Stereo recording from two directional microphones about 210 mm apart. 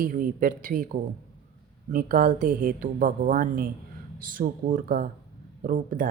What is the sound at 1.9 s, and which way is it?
A woman's voice, 40° right (ahead or behind).